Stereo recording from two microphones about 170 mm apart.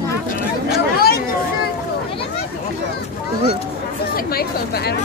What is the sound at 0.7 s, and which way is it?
Chatter, 65° left (ahead or behind).